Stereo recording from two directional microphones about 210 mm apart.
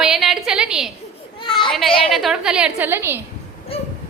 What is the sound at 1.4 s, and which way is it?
Children playing, 25° left (ahead or behind).